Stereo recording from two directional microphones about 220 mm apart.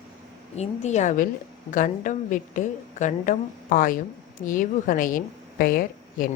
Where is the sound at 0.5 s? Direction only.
30° left (ahead or behind).